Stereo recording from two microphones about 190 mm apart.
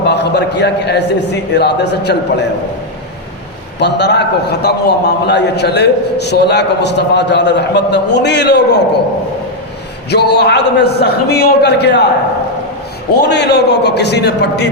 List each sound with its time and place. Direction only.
0.0 s a man's voice: 60° left (ahead or behind)
3.8 s a man's voice: 65° left (ahead or behind)
10.1 s a man's voice: 60° left (ahead or behind)
13.1 s a man's voice: 60° left (ahead or behind)